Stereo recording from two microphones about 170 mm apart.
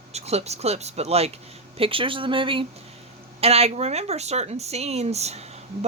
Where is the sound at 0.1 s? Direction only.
40° right (ahead or behind).